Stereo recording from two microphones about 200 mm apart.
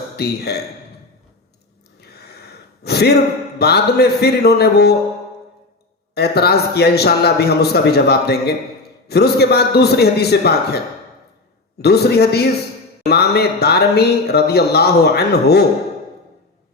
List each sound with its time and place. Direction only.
0.2 s speech: 55° left (ahead or behind)
2.8 s gasp: 55° left (ahead or behind)
3.6 s speech: 55° left (ahead or behind)
6.1 s speech: 55° left (ahead or behind)
11.8 s speech: 55° left (ahead or behind)